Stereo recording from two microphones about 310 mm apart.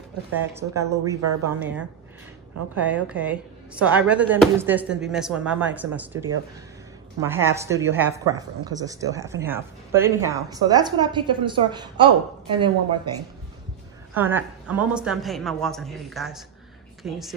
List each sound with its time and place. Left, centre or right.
0.6 s speech: right
1.0 s speech: centre
2.8 s speech: centre
14.1 s speech: centre